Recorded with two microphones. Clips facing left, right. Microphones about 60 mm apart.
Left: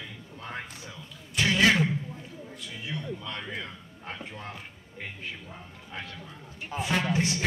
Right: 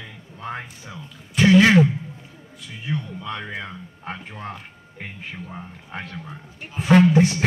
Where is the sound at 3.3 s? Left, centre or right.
Right.